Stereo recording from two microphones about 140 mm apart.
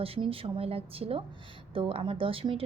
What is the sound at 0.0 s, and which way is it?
A woman's voice, 40° right (ahead or behind).